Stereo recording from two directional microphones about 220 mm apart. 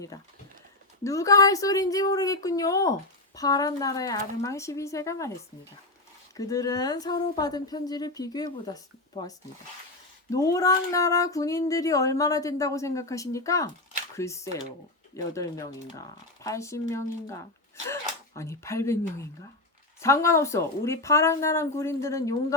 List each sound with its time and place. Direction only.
1.0 s speech: 15° left (ahead or behind)
6.3 s speech: 15° left (ahead or behind)